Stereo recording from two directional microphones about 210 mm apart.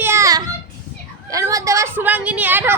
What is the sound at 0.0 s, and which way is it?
Child singing, 15° right (ahead or behind).